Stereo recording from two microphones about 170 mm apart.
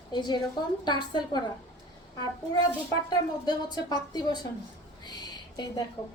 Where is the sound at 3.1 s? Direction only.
25° left (ahead or behind).